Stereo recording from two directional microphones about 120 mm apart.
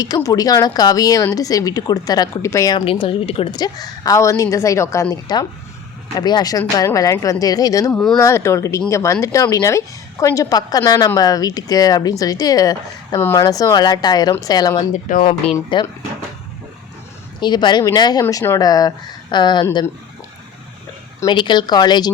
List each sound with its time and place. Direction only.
0.0 s a woman's voice: 30° left (ahead or behind)
2.7 s speech: 50° left (ahead or behind)
3.5 s a woman's voice: 35° left (ahead or behind)
13.1 s a woman's voice: 20° left (ahead or behind)
15.2 s speech: 50° left (ahead or behind)
17.4 s a woman's voice: 40° left (ahead or behind)
21.2 s a woman's voice: 40° left (ahead or behind)